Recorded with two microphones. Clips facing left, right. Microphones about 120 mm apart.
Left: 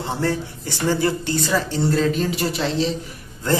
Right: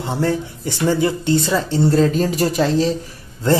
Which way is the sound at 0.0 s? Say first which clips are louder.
Right 3 dB; 20° right (ahead or behind).